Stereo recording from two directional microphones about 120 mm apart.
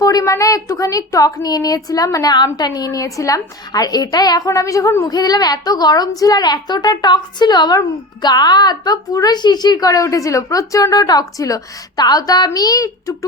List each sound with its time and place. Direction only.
0.0 s a woman's voice: 30° left (ahead or behind)